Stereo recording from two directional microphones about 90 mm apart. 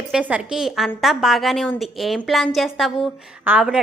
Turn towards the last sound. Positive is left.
turn(degrees=-10)  # may be behind; listen again after turning